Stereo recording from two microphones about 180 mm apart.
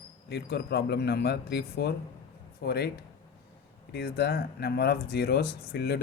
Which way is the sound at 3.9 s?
65° left (ahead or behind).